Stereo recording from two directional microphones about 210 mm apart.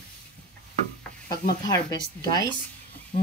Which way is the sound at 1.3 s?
20° left (ahead or behind).